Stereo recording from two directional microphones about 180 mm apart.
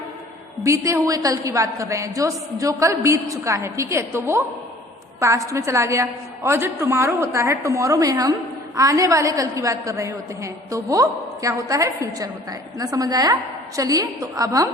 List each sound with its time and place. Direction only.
0.6 s a woman's voice: 15° right (ahead or behind)